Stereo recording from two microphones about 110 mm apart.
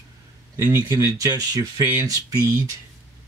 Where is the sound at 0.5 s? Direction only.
25° right (ahead or behind).